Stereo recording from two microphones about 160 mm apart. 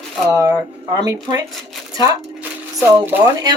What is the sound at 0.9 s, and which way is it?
Speech, 25° right (ahead or behind).